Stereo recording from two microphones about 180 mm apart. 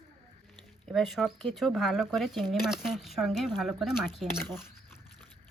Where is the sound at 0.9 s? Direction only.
Centre (ahead or behind).